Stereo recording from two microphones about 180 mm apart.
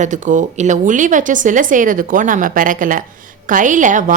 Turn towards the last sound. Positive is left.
turn(degrees=-45)  # may be behind; listen again after turning